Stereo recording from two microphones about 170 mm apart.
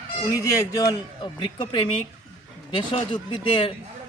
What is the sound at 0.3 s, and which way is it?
A man's voice, 20° left (ahead or behind).